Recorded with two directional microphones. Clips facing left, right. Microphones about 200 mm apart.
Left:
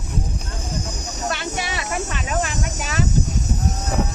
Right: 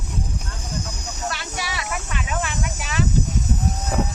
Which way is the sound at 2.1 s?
40° left (ahead or behind).